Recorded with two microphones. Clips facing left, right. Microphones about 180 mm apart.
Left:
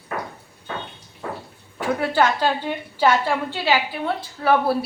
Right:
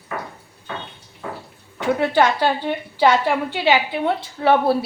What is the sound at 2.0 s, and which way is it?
A woman's voice, 15° right (ahead or behind).